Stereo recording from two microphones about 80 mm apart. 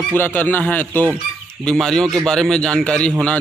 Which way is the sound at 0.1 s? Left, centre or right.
Left.